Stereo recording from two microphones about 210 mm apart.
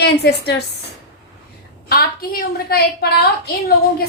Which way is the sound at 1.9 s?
45° left (ahead or behind).